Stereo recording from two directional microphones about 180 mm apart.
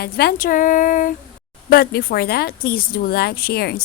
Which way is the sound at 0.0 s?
60° left (ahead or behind).